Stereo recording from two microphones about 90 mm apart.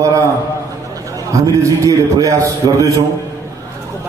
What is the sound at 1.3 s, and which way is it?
A man's voice, 35° right (ahead or behind).